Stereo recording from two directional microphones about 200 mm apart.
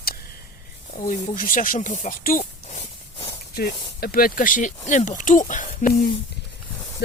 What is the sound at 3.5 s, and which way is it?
Speech, 50° left (ahead or behind).